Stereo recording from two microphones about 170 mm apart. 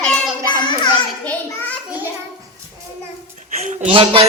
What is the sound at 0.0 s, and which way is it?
Child singing, 5° left (ahead or behind).